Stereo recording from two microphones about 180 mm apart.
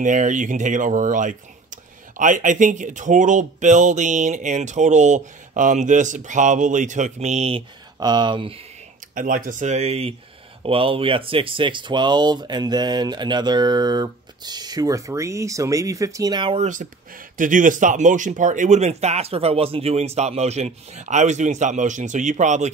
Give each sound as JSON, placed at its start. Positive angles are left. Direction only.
{"t": 0.0, "sound": "speech", "side_deg": -45}
{"t": 9.1, "sound": "speech", "side_deg": -50}
{"t": 16.5, "sound": "speech", "side_deg": -45}